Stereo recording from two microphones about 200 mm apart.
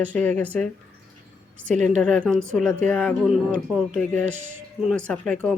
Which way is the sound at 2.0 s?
5° left (ahead or behind).